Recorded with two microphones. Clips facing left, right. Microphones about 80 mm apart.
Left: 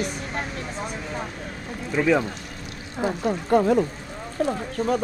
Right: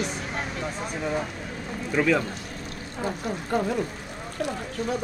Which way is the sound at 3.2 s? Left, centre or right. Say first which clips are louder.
Left 8 dB; left.